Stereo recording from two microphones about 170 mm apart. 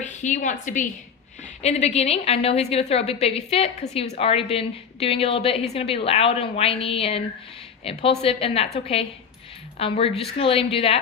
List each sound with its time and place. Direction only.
0.0 s a woman's voice: 45° left (ahead or behind)